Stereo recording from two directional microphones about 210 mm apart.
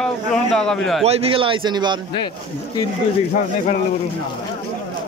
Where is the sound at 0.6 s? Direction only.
Centre (ahead or behind).